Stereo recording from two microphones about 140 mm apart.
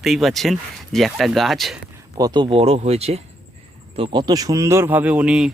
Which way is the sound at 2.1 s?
30° right (ahead or behind).